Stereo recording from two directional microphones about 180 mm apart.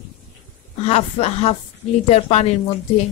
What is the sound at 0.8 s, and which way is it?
A woman's voice, 35° left (ahead or behind).